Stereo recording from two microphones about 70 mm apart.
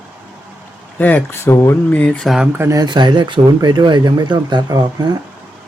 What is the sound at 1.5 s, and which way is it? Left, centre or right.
Speech, left.